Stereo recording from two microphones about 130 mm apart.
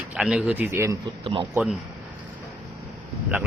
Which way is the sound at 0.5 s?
20° right (ahead or behind).